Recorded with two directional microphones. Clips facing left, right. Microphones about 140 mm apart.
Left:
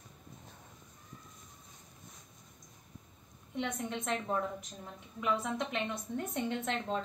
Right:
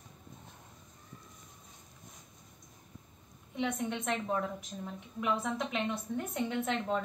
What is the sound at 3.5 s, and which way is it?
A woman's voice, centre (ahead or behind).